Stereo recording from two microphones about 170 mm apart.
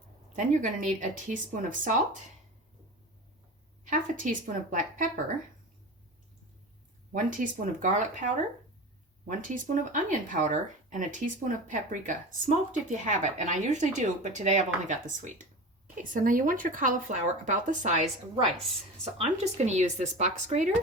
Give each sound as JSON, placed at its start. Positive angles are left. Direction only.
{"t": 0.3, "sound": "speech", "side_deg": -50}
{"t": 3.8, "sound": "speech", "side_deg": -50}
{"t": 7.1, "sound": "speech", "side_deg": -50}
{"t": 19.1, "sound": "speech", "side_deg": -40}